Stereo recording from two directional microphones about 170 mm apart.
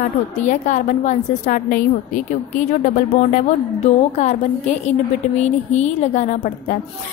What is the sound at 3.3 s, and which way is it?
A woman's voice, 45° left (ahead or behind).